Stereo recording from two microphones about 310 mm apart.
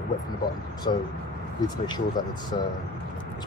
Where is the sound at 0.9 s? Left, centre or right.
Centre.